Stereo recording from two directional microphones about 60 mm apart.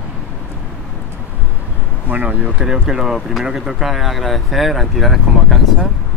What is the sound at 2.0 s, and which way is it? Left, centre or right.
Speech, right.